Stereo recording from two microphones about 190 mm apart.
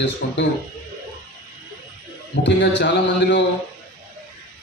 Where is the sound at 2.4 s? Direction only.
65° left (ahead or behind).